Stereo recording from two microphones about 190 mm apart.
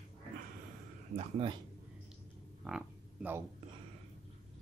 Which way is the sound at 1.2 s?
30° right (ahead or behind).